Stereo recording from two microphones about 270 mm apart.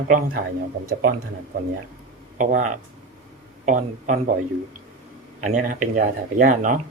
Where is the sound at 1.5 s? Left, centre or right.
Right.